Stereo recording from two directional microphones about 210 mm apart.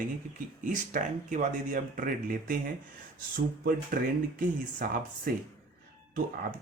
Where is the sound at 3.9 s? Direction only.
40° right (ahead or behind).